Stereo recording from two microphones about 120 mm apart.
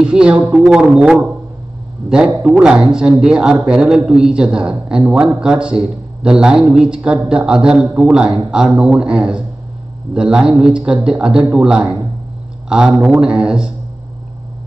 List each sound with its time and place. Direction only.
0.0 s a man's voice: 5° right (ahead or behind)